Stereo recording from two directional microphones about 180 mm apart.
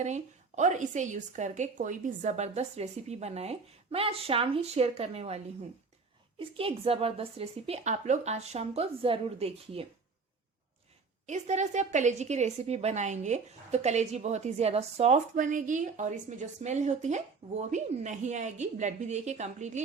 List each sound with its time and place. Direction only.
0.0 s a woman's voice: 40° right (ahead or behind)
6.6 s a woman's voice: 30° right (ahead or behind)
11.3 s a woman's voice: 40° right (ahead or behind)